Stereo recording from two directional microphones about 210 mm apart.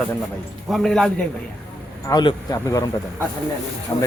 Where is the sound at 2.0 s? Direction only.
20° left (ahead or behind).